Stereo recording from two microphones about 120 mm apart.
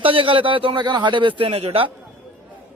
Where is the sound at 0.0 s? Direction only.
45° right (ahead or behind).